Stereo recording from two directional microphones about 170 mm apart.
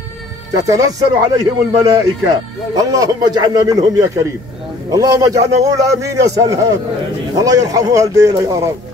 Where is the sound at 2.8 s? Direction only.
20° right (ahead or behind).